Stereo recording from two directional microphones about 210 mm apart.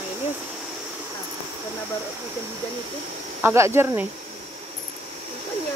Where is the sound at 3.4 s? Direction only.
10° right (ahead or behind).